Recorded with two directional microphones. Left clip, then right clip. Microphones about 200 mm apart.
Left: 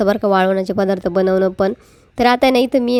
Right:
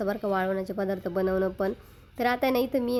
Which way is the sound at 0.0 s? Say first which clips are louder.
Left 13 dB; 35° left (ahead or behind).